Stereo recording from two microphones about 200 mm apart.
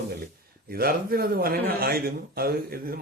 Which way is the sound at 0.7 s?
50° right (ahead or behind).